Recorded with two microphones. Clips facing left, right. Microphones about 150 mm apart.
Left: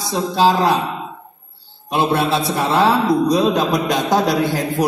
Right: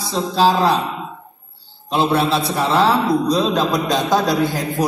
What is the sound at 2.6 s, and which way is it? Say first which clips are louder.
A man's voice: even; 15° left (ahead or behind).